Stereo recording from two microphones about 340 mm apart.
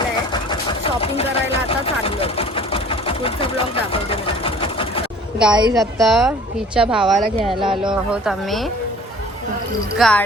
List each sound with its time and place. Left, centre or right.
0.7 s chopping: centre
2.0 s vehicle: centre
5.4 s a woman's voice: centre
7.3 s speech: centre
8.1 s a woman's voice: centre
10.0 s a woman's voice: centre